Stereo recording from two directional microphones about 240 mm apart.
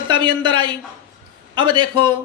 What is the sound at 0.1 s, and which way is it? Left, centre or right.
Speech, centre.